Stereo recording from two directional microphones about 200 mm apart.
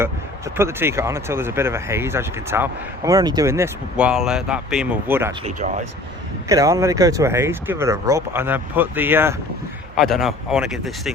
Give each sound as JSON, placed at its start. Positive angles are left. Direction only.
{"t": 0.5, "sound": "speech", "side_deg": -10}
{"t": 5.5, "sound": "speech", "side_deg": -35}
{"t": 6.5, "sound": "speech", "side_deg": -15}